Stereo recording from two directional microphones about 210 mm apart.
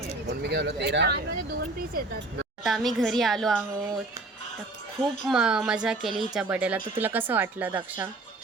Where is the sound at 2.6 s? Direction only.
Centre (ahead or behind).